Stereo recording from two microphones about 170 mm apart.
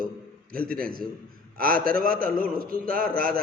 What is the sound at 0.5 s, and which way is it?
A man's voice, 60° right (ahead or behind).